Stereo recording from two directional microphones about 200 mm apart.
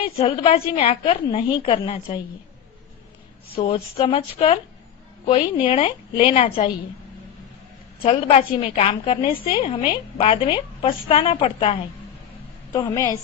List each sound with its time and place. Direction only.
0.0 s a woman's voice: 30° left (ahead or behind)
3.5 s a woman's voice: 30° left (ahead or behind)
8.0 s a woman's voice: 30° left (ahead or behind)